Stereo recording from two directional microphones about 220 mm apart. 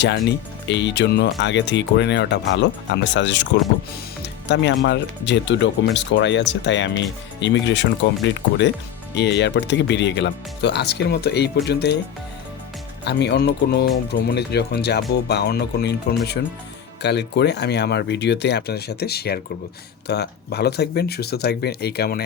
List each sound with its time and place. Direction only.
0.0 s speech: 50° left (ahead or behind)
13.1 s speech: 50° left (ahead or behind)